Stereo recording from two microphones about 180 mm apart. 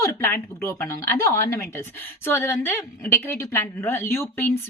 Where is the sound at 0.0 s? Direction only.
15° left (ahead or behind).